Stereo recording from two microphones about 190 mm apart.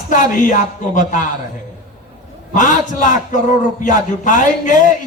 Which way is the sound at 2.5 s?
40° left (ahead or behind).